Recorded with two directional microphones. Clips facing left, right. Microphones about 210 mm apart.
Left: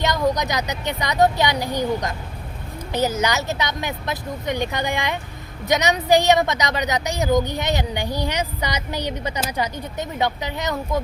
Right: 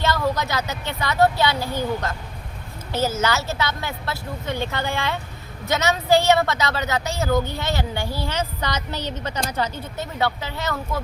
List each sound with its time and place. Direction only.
0.0 s a woman's voice: 15° left (ahead or behind)